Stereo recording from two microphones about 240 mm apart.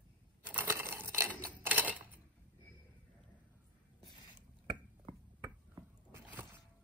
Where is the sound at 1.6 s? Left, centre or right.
Centre.